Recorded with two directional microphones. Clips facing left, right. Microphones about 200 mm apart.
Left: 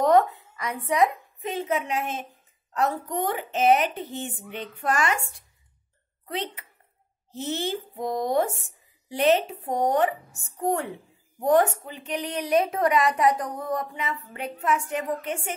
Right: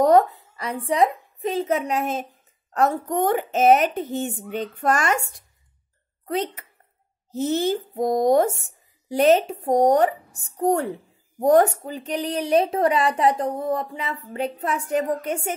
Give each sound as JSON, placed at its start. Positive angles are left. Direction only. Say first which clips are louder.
{"t": 0.0, "sound": "a woman's voice", "louder": "right 3 dB", "side_deg": -35}
{"t": 6.2, "sound": "speech", "louder": "right 6 dB", "side_deg": -45}